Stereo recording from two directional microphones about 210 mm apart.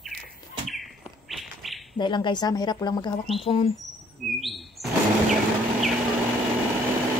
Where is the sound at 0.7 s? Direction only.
Centre (ahead or behind).